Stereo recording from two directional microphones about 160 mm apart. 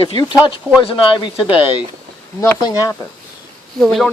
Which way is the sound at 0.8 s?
35° left (ahead or behind).